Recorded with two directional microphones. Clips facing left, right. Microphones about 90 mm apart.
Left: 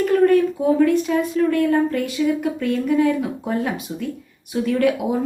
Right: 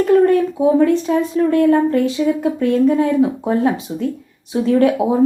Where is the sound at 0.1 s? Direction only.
25° right (ahead or behind).